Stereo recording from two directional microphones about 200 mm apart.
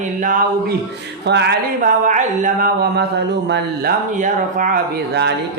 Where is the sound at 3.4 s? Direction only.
60° right (ahead or behind).